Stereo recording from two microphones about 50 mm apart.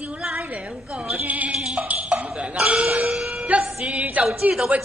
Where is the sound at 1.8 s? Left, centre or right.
Right.